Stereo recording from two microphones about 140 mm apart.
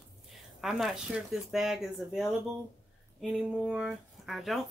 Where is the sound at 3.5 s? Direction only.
5° right (ahead or behind).